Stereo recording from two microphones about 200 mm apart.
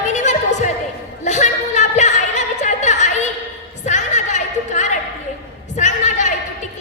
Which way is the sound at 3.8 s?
35° left (ahead or behind).